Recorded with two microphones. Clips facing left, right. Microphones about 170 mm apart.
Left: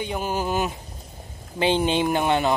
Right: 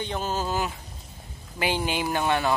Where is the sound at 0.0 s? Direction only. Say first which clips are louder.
Left 2 dB; 10° left (ahead or behind).